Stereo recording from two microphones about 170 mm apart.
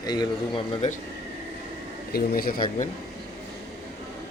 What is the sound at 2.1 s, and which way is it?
Speech, 60° left (ahead or behind).